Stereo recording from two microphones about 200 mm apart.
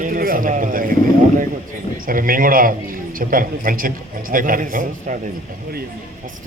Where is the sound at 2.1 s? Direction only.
45° right (ahead or behind).